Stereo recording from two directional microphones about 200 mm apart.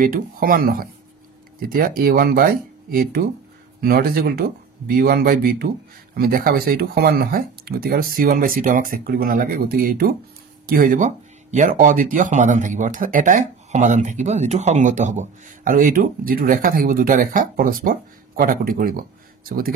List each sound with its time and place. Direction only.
0.0 s speech: 45° right (ahead or behind)